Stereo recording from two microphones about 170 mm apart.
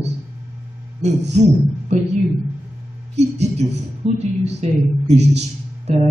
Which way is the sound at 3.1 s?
40° right (ahead or behind).